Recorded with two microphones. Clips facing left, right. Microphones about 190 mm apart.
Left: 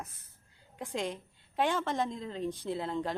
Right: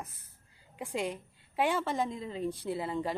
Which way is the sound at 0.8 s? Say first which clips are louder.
Right 1 dB; 5° right (ahead or behind).